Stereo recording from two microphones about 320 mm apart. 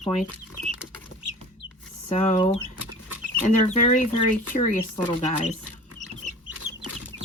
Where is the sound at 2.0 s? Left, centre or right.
Left.